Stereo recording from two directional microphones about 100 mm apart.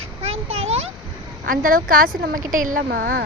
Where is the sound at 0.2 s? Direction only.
85° right.